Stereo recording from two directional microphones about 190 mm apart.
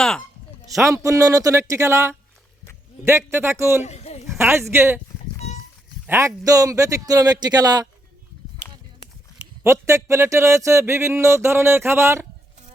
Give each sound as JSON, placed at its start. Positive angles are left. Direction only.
{"t": 0.0, "sound": "speech", "side_deg": 5}
{"t": 0.7, "sound": "speech", "side_deg": -15}
{"t": 3.8, "sound": "speech", "side_deg": 35}
{"t": 4.3, "sound": "speech", "side_deg": -15}
{"t": 6.1, "sound": "speech", "side_deg": -15}
{"t": 9.6, "sound": "speech", "side_deg": -15}